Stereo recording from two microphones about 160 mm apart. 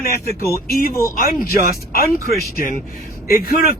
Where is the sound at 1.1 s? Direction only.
65° left (ahead or behind).